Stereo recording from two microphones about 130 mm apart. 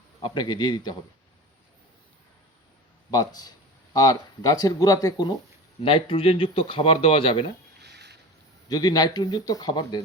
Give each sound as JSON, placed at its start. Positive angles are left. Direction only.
{"t": 0.2, "sound": "speech", "side_deg": 35}
{"t": 3.1, "sound": "speech", "side_deg": 30}
{"t": 5.8, "sound": "speech", "side_deg": 45}
{"t": 8.7, "sound": "speech", "side_deg": 30}